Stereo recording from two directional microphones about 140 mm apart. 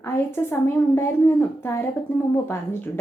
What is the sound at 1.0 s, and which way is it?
Speech, 20° left (ahead or behind).